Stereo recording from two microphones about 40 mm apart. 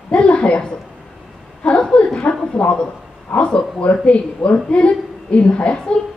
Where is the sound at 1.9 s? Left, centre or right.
Left.